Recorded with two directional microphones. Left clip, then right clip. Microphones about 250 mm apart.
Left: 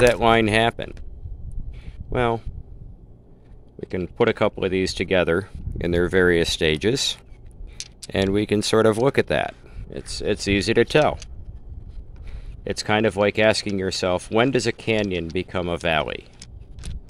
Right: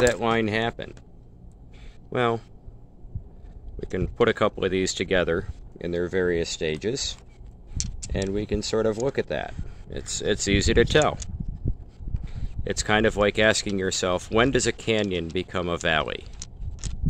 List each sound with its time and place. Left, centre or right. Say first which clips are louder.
0.0 s speech: left 6 dB; left
2.0 s speech: left 2 dB; centre
3.8 s speech: left 2 dB; centre; by 9.6 s left
9.8 s speech: left 1 dB; centre
12.6 s speech: left 1 dB; centre